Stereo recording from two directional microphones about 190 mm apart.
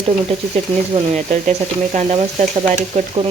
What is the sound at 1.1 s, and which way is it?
Speech, 35° right (ahead or behind).